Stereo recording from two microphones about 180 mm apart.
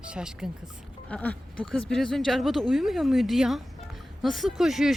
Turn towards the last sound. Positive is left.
turn(degrees=0)  # may be behind; listen again after turning